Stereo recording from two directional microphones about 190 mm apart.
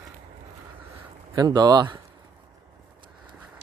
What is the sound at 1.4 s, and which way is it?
Speech, 20° right (ahead or behind).